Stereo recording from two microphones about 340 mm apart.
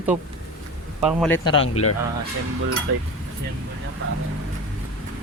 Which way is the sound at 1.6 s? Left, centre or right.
Left.